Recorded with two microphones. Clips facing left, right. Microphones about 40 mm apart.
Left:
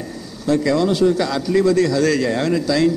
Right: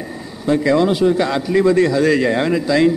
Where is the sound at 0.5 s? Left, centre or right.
Right.